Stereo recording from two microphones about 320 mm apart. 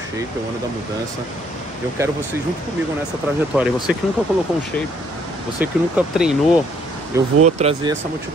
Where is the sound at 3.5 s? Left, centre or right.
Centre.